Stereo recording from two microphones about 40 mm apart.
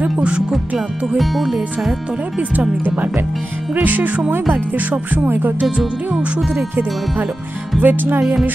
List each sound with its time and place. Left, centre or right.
0.5 s speech: centre
2.8 s speech: right
4.5 s music: right
5.1 s speech: right
8.2 s music: centre